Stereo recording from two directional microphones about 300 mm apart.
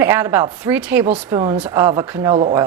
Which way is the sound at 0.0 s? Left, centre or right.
Centre.